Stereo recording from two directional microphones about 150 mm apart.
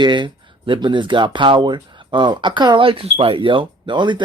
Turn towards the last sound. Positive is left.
turn(degrees=-30)  # may be behind; listen again after turning